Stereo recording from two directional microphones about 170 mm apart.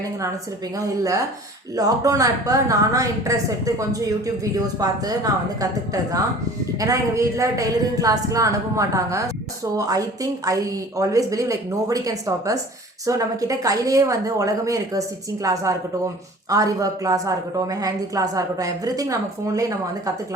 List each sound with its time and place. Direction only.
0.8 s a woman's voice: 20° right (ahead or behind)